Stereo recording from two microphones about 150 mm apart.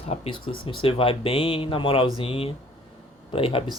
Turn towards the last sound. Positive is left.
turn(degrees=40)  # may be behind; listen again after turning